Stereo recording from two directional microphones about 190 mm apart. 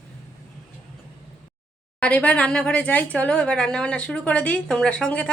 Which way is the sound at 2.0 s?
5° left (ahead or behind).